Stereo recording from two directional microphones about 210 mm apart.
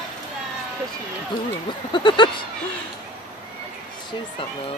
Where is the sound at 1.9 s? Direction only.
25° left (ahead or behind).